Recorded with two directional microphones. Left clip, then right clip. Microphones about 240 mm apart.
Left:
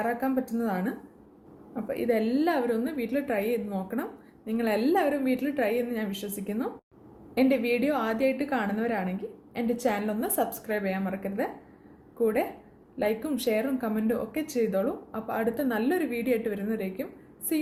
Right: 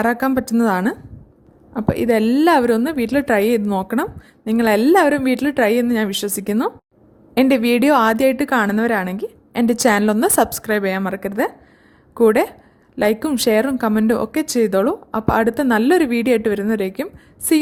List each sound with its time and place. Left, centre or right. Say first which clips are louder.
0.0 s a woman's voice: right 10 dB; right